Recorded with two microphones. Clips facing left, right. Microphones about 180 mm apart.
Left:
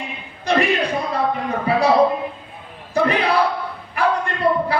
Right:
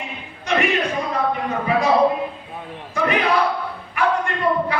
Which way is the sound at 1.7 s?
35° left (ahead or behind).